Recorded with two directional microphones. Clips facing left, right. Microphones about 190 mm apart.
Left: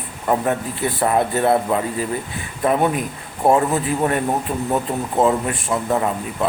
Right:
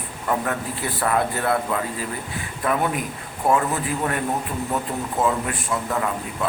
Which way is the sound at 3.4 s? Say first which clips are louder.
Left 5 dB; 30° left (ahead or behind).